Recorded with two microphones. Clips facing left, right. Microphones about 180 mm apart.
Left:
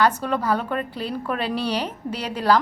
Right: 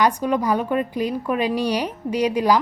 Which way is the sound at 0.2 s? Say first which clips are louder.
Right 3 dB; 15° right (ahead or behind).